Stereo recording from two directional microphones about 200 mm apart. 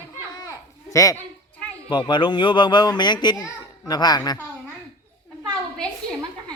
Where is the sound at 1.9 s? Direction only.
25° left (ahead or behind).